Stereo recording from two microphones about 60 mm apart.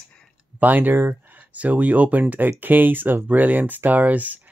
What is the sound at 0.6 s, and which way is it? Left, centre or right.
Speech, right.